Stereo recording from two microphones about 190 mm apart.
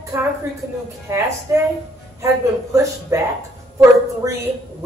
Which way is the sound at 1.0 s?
15° right (ahead or behind).